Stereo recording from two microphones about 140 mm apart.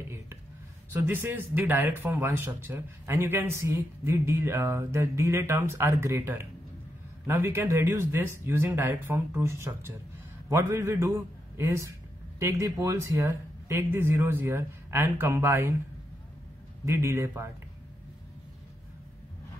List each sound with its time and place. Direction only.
1.0 s a man's voice: 15° right (ahead or behind)
16.8 s speech: 20° right (ahead or behind)